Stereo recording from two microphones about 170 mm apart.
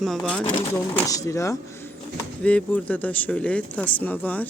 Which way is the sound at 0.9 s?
20° left (ahead or behind).